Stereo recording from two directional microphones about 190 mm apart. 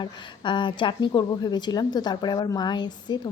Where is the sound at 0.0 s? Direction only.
25° left (ahead or behind).